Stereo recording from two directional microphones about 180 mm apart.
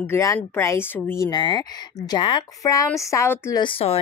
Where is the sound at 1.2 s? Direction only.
25° left (ahead or behind).